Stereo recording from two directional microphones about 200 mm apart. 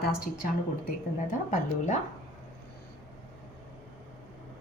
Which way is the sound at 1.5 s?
35° left (ahead or behind).